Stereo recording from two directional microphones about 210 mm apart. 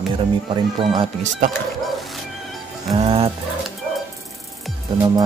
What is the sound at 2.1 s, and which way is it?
Music, centre (ahead or behind).